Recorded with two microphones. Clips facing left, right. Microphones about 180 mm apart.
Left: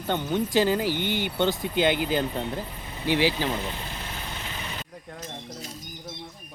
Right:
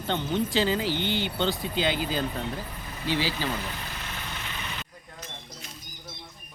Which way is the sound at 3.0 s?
15° left (ahead or behind).